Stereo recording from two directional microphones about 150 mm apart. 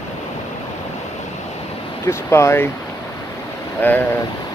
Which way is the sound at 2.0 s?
20° left (ahead or behind).